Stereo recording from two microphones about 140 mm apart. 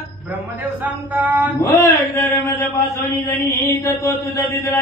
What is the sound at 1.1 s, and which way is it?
Mantra, 10° right (ahead or behind).